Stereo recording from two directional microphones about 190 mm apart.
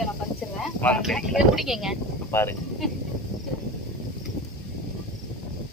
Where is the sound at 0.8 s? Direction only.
5° left (ahead or behind).